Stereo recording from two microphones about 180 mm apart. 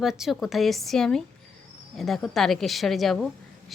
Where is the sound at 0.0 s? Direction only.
Centre (ahead or behind).